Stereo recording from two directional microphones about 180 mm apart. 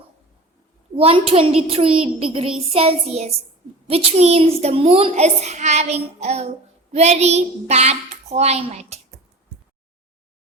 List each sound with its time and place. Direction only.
0.9 s a child's voice: 30° right (ahead or behind)